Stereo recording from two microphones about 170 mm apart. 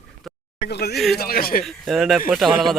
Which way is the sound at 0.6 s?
70° left (ahead or behind).